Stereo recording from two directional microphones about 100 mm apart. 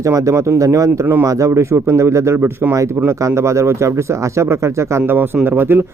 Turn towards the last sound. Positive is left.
turn(degrees=-20)  # may be behind; listen again after turning